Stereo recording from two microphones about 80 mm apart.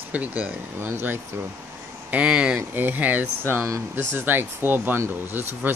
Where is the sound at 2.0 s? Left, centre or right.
Centre.